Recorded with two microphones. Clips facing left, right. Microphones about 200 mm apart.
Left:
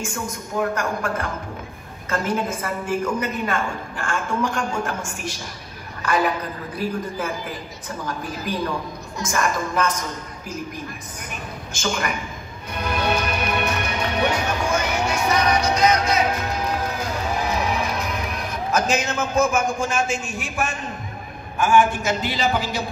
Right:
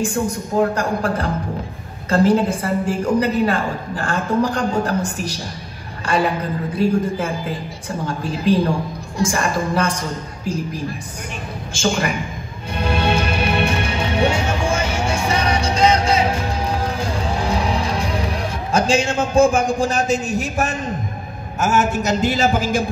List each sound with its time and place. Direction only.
0.0 s a woman's voice: 35° right (ahead or behind)
12.7 s music: 30° right (ahead or behind)
21.5 s a man's voice: 40° right (ahead or behind)